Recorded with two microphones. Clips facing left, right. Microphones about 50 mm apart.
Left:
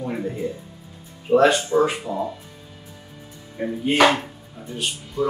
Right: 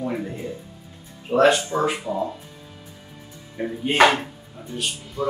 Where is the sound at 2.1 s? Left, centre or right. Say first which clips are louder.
Even; right.